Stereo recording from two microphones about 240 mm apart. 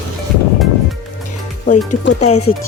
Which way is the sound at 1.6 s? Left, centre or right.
Left.